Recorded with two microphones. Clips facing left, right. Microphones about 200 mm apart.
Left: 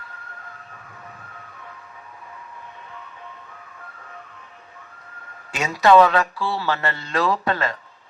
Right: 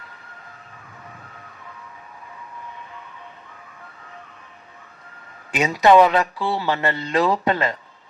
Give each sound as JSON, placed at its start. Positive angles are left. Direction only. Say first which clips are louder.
{"t": 5.5, "sound": "speech", "louder": "right 1 dB", "side_deg": -20}